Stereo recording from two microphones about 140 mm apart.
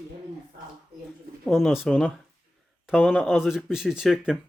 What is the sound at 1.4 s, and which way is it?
Speech, 5° right (ahead or behind).